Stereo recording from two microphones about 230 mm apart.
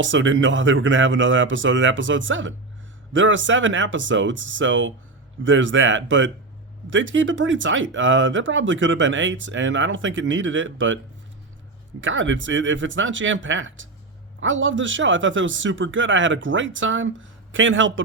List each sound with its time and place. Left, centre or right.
0.0 s speech: right